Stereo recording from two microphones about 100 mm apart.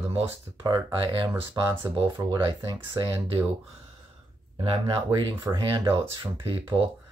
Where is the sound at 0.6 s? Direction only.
45° right (ahead or behind).